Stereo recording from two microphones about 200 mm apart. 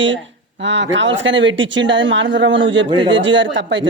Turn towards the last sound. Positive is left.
turn(degrees=-65)  # may be behind; listen again after turning